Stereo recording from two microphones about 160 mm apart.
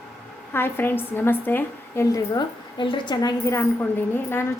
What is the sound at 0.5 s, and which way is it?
A woman's voice, 15° left (ahead or behind).